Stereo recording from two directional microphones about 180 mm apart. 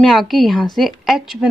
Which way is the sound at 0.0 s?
Centre (ahead or behind).